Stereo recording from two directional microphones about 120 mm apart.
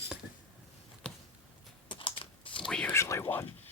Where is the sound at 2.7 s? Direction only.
10° left (ahead or behind).